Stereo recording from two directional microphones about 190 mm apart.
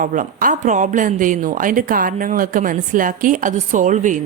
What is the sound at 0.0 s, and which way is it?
A woman's voice, 45° right (ahead or behind).